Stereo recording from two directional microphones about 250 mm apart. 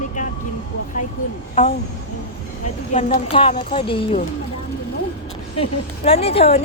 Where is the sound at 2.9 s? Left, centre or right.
Left.